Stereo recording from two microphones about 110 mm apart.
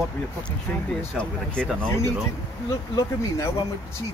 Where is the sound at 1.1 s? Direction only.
10° left (ahead or behind).